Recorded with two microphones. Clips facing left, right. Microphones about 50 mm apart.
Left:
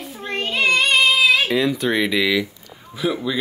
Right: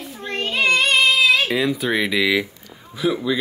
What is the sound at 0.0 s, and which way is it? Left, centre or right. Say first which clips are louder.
Child singing: even; centre.